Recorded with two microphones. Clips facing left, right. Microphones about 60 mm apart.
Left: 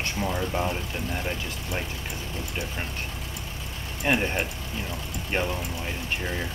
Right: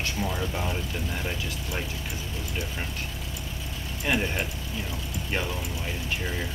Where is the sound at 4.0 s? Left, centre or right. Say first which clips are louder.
Left 2 dB; centre.